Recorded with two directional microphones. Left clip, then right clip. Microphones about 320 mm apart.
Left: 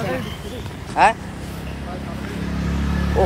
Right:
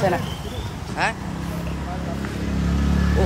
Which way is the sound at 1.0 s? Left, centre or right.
Centre.